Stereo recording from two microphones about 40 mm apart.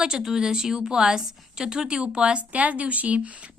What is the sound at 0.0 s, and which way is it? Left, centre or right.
A woman's voice, centre.